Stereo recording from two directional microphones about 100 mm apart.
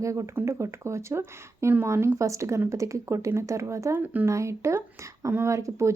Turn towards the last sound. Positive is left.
turn(degrees=-30)  # may be behind; listen again after turning